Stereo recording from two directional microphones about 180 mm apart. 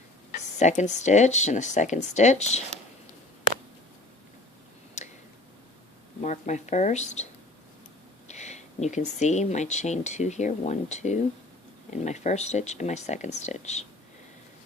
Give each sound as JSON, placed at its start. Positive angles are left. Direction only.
{"t": 0.3, "sound": "speech", "side_deg": 40}
{"t": 5.0, "sound": "tick", "side_deg": 40}
{"t": 6.2, "sound": "speech", "side_deg": 40}
{"t": 8.3, "sound": "speech", "side_deg": 40}